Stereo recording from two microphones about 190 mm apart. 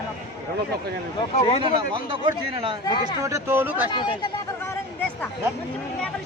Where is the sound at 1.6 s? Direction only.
25° right (ahead or behind).